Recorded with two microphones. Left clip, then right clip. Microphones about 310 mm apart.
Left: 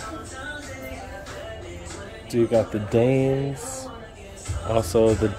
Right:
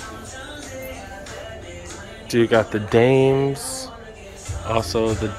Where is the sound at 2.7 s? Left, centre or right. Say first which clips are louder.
Right 5 dB; centre.